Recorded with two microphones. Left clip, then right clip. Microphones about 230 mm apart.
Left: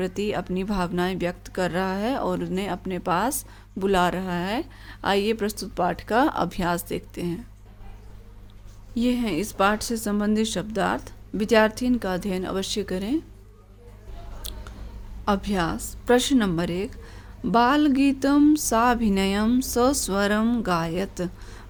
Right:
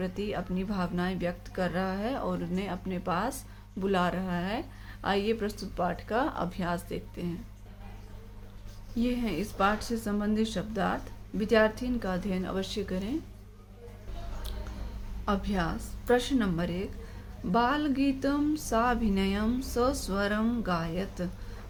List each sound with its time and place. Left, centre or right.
0.0 s speech: left
9.0 s speech: left
14.5 s a sound: left
15.2 s speech: left